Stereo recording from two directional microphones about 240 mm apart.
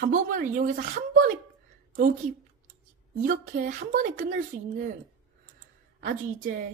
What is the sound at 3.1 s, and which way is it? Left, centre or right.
A woman's voice, right.